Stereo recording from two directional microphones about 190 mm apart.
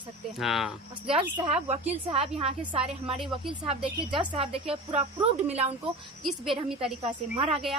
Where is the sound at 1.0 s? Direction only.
30° right (ahead or behind).